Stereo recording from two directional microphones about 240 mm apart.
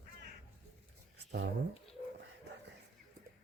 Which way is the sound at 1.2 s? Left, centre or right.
Right.